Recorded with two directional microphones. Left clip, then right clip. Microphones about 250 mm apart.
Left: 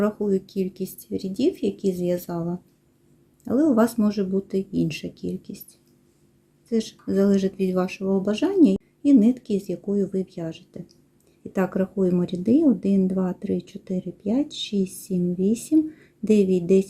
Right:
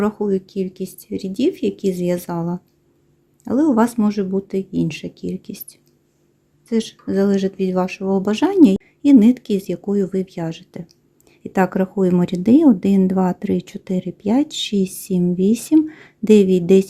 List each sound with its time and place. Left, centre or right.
0.0 s speech: centre